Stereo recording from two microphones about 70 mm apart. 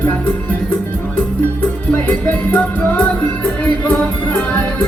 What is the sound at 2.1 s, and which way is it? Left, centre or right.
Music, left.